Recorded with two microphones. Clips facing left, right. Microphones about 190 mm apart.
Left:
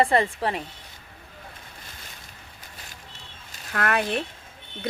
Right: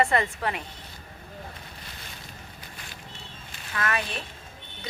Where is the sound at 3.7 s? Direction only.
60° left (ahead or behind).